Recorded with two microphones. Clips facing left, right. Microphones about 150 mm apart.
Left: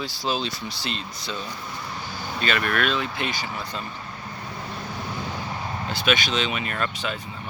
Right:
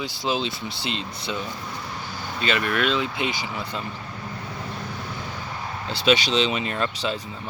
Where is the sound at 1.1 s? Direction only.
60° right (ahead or behind).